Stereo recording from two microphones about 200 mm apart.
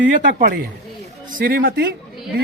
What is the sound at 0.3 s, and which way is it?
A man's voice, 55° right (ahead or behind).